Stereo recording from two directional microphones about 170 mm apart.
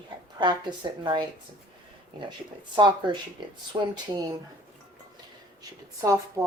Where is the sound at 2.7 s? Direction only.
25° right (ahead or behind).